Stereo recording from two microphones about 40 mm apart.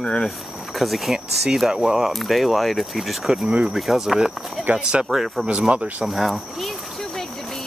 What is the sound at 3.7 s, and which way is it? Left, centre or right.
Speech, centre.